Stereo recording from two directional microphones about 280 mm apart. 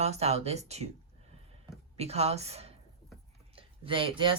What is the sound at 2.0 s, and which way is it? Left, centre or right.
A woman's voice, right.